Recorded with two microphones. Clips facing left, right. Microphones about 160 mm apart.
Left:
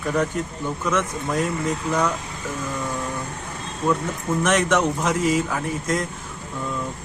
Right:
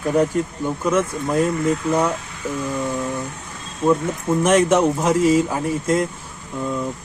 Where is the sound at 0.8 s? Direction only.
30° right (ahead or behind).